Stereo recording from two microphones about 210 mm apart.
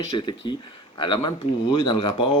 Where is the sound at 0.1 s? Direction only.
20° left (ahead or behind).